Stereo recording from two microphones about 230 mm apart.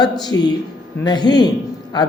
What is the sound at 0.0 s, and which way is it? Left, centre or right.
A woman's voice, centre.